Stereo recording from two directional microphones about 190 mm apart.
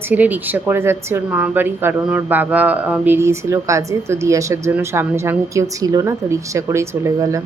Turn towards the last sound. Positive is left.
turn(degrees=-15)  # may be behind; listen again after turning